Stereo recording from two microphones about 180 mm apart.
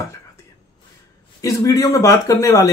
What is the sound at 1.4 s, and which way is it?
Speech, 20° left (ahead or behind).